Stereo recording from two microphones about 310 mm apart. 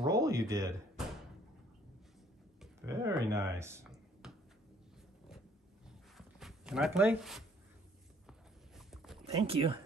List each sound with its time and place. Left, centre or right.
0.1 s speech: centre
2.6 s speech: centre
5.9 s zipper: centre
8.3 s a sound: centre
9.2 s speech: centre